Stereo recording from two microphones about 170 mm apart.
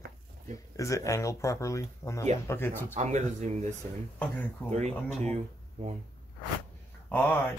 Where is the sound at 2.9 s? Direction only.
45° right (ahead or behind).